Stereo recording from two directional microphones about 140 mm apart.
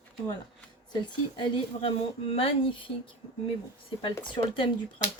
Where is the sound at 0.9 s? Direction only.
35° left (ahead or behind).